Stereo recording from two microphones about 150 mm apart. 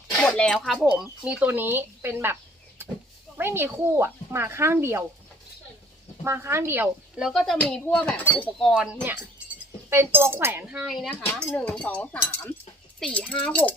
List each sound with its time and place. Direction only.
0.3 s speech: 5° left (ahead or behind); by 5.0 s 15° right (ahead or behind)
6.2 s speech: 20° right (ahead or behind)
7.2 s speech: centre (ahead or behind)
8.7 s speech: 5° right (ahead or behind)
11.4 s speech: 10° left (ahead or behind)